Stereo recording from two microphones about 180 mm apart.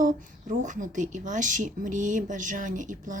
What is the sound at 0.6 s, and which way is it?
Speech, 45° right (ahead or behind).